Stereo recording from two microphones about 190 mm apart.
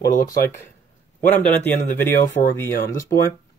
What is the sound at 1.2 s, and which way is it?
Speech, 10° left (ahead or behind).